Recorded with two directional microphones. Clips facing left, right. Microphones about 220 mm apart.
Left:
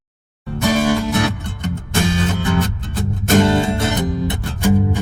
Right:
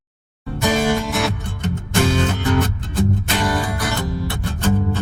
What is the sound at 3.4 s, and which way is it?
Music, 25° left (ahead or behind).